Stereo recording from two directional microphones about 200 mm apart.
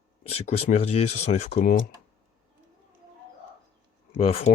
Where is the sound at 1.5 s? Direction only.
45° left (ahead or behind).